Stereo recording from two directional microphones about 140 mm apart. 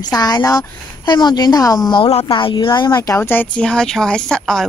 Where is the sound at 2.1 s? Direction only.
45° left (ahead or behind).